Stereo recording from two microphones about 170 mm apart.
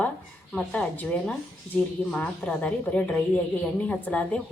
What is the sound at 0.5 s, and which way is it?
A woman's voice, 5° left (ahead or behind).